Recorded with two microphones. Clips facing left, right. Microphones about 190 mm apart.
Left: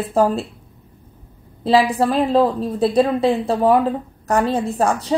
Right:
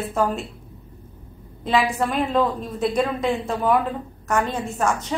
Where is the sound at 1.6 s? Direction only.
35° left (ahead or behind).